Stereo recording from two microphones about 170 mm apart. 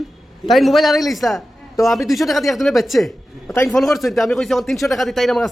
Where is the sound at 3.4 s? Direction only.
15° left (ahead or behind).